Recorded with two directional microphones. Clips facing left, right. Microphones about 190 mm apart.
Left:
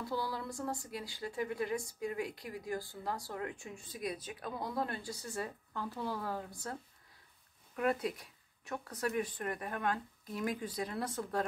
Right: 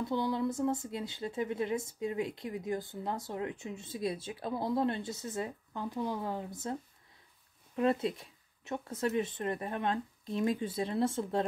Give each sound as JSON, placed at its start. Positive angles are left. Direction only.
{"t": 0.0, "sound": "speech", "side_deg": -20}